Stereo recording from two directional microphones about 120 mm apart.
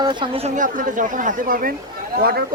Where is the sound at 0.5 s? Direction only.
90° right.